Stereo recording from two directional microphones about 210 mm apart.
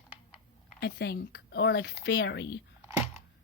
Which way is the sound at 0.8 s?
50° left (ahead or behind).